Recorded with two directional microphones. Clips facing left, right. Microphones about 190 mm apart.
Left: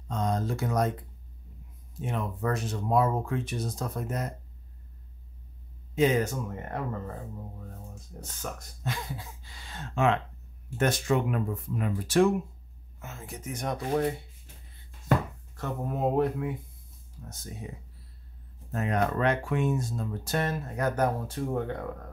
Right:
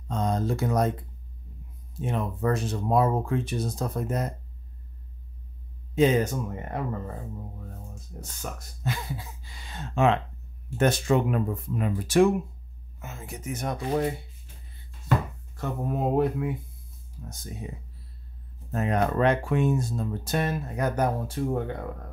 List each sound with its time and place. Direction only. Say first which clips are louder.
0.1 s speech: right 3 dB; 30° right (ahead or behind)
2.0 s speech: right 3 dB; 30° right (ahead or behind)
5.9 s speech: right 3 dB; 25° right (ahead or behind)
8.2 s speech: even; 5° right (ahead or behind); by 11.9 s 30° right (ahead or behind)
12.0 s speech: right 3 dB; 15° right (ahead or behind)
15.5 s speech: right 3 dB; 10° right (ahead or behind)
18.7 s speech: right 2 dB; 30° right (ahead or behind)
20.2 s speech: right 1 dB; 15° right (ahead or behind)